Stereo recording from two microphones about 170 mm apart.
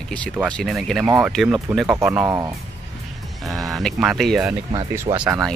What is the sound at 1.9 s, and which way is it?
Speech, 15° right (ahead or behind).